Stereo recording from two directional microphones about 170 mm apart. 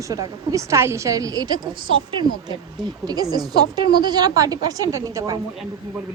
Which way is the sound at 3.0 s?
20° right (ahead or behind).